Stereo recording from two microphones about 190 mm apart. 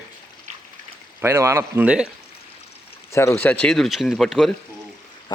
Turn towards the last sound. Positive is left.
turn(degrees=0)  # may be behind; listen again after turning